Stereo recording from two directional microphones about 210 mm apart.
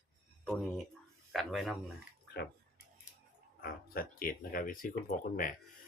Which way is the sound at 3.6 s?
45° left (ahead or behind).